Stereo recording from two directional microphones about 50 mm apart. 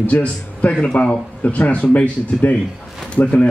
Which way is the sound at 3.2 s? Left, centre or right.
Left.